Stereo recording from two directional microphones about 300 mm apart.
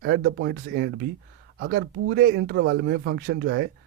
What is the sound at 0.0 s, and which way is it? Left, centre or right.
Speech, right.